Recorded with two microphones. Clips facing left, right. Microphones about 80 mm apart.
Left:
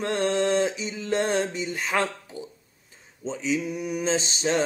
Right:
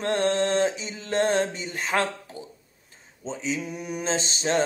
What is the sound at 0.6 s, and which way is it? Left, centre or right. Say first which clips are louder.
Mantra: right 1 dB; right.